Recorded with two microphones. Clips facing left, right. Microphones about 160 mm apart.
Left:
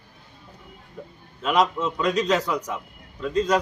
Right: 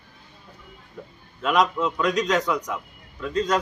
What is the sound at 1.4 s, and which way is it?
Speech, 30° left (ahead or behind).